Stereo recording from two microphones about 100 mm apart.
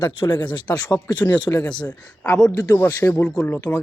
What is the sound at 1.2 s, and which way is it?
Speech, 15° left (ahead or behind).